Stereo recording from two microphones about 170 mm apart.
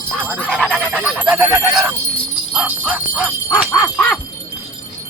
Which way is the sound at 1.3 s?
15° right (ahead or behind).